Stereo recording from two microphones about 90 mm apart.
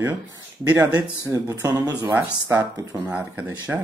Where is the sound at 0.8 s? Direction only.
40° right (ahead or behind).